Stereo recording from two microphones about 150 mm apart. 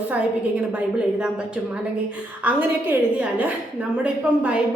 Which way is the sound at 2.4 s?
10° right (ahead or behind).